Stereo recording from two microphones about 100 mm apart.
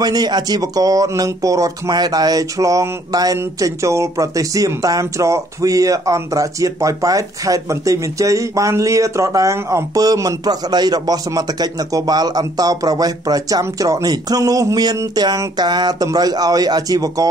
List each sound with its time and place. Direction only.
0.0 s speech: 40° right (ahead or behind)